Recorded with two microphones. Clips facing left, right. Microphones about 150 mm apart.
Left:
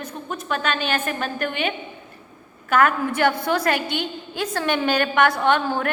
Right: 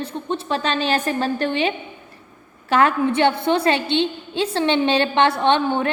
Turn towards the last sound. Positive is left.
turn(degrees=-25)  # may be behind; listen again after turning